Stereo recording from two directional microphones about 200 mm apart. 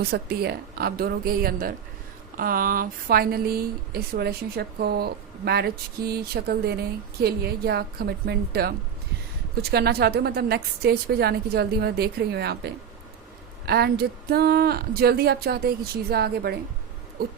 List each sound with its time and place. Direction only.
0.1 s speech: 50° right (ahead or behind)